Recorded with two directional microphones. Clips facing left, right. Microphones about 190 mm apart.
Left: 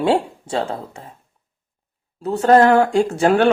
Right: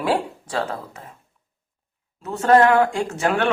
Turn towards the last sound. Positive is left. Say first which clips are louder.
# left 7 dB
turn(degrees=35)  # may be behind; listen again after turning